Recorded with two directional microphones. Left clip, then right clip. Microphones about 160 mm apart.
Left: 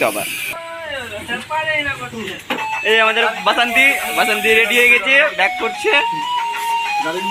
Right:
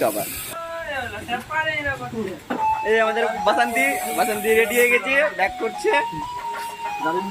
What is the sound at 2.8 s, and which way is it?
A man's voice, 10° left (ahead or behind).